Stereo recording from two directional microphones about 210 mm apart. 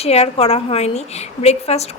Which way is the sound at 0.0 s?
30° left (ahead or behind).